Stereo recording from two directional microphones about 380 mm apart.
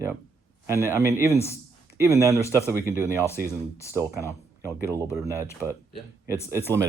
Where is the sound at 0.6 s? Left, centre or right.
Centre.